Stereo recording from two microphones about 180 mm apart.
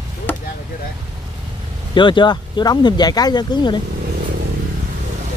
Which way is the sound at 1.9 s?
25° left (ahead or behind).